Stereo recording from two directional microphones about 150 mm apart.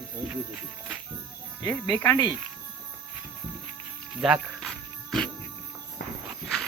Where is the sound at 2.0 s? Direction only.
15° left (ahead or behind).